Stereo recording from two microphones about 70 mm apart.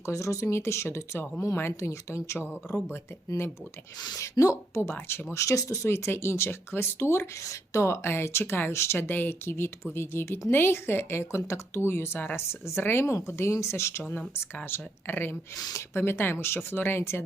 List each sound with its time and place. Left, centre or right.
0.0 s speech: left
2.5 s speech: left
3.2 s speech: left
4.8 s speech: left
7.4 s speech: left